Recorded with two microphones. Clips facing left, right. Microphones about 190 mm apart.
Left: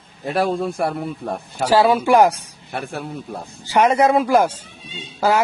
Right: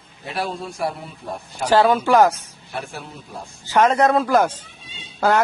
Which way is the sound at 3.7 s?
10° left (ahead or behind).